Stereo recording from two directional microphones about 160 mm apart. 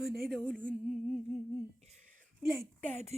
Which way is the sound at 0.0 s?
Centre (ahead or behind).